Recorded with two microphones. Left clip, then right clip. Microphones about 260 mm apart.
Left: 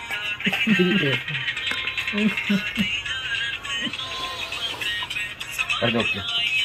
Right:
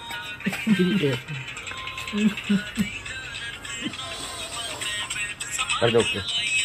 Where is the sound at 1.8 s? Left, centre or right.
Centre.